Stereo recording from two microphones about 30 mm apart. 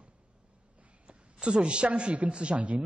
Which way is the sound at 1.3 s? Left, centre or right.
Right.